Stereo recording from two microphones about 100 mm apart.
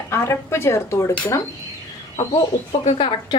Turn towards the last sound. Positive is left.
turn(degrees=55)  # may be behind; listen again after turning